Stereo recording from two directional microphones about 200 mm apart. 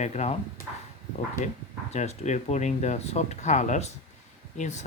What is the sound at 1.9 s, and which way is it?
Speech, 35° left (ahead or behind).